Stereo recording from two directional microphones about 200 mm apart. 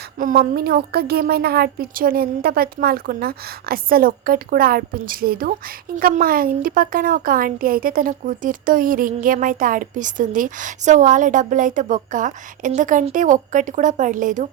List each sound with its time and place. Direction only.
0.2 s a woman's voice: 45° right (ahead or behind)